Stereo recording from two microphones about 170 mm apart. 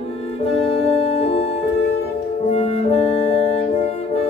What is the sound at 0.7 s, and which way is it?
Organ, 35° left (ahead or behind).